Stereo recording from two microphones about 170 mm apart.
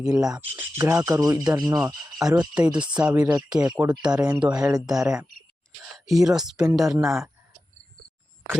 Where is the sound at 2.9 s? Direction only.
5° right (ahead or behind).